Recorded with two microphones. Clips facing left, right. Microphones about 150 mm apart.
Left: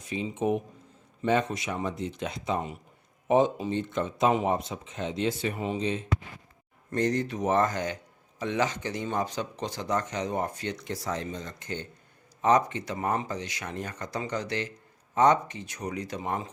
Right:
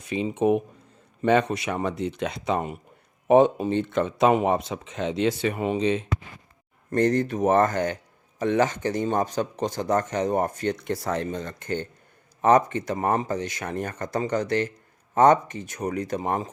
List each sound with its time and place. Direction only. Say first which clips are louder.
0.0 s speech: right 6 dB; 65° right (ahead or behind)
6.9 s speech: right 5 dB; 55° right (ahead or behind)